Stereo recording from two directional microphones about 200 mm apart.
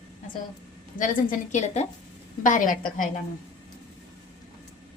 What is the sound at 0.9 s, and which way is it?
A woman's voice, 40° left (ahead or behind).